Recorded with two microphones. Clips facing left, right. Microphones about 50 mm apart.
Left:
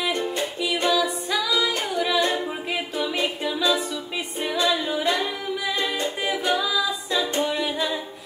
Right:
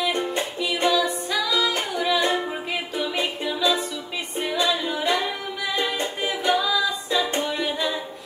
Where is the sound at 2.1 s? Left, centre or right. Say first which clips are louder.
Even; right.